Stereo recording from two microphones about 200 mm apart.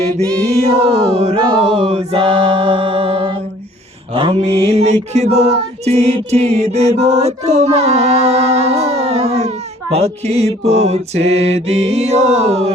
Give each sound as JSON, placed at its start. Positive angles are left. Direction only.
{"t": 0.6, "sound": "music", "side_deg": -30}
{"t": 4.1, "sound": "mantra", "side_deg": -25}
{"t": 4.6, "sound": "music", "side_deg": -30}
{"t": 7.2, "sound": "a sound", "side_deg": -35}
{"t": 11.3, "sound": "music", "side_deg": -30}